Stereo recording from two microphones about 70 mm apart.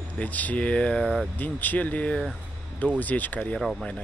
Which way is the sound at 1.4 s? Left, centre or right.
Left.